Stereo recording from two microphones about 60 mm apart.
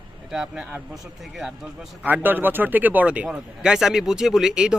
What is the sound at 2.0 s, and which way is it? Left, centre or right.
Speech, right.